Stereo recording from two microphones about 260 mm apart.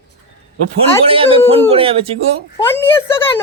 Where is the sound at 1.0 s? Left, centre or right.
Right.